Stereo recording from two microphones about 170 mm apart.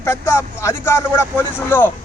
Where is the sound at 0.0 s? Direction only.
15° left (ahead or behind).